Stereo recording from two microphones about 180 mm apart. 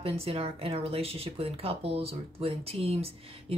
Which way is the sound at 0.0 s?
30° right (ahead or behind).